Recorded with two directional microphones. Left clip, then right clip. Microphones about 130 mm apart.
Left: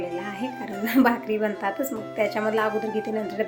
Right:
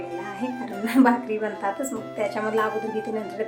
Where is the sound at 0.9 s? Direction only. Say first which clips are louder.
Right 1 dB; 15° left (ahead or behind).